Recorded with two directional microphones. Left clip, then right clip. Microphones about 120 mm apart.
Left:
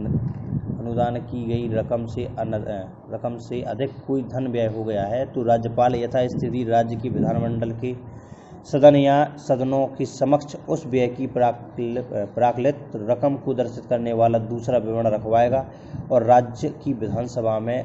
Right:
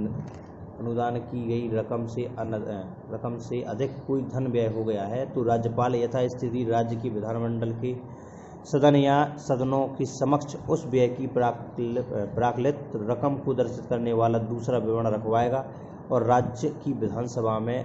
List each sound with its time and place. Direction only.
0.8 s speech: 50° left (ahead or behind)
8.7 s a man's voice: 35° left (ahead or behind)